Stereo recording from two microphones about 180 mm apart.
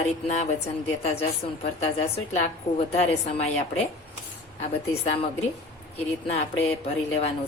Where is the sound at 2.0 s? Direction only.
35° left (ahead or behind).